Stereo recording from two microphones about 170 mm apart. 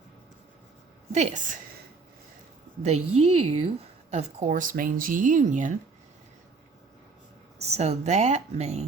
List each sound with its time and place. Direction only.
1.1 s a woman's voice: 45° right (ahead or behind)
2.8 s a woman's voice: 40° right (ahead or behind)
7.6 s a woman's voice: 40° right (ahead or behind)